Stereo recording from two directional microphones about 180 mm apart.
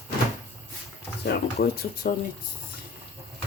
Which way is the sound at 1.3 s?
60° left (ahead or behind).